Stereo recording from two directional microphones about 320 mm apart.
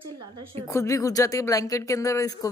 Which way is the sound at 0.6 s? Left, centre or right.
Centre.